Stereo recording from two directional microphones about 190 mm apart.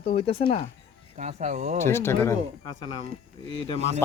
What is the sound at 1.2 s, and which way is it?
Speech, 35° right (ahead or behind).